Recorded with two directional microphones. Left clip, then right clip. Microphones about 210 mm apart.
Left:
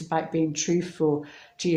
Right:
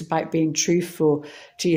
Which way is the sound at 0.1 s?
45° right (ahead or behind).